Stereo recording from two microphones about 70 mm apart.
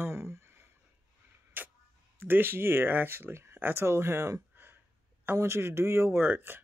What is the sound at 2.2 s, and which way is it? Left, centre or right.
Speech, right.